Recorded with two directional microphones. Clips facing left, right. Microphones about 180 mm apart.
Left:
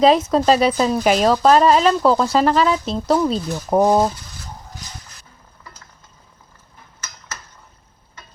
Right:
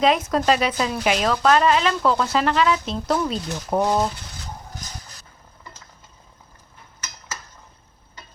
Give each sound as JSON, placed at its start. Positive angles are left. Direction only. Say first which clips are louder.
{"t": 0.0, "sound": "speech", "louder": "left 5 dB", "side_deg": 30}